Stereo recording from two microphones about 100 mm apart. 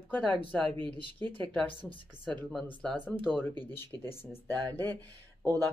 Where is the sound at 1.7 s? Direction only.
60° left (ahead or behind).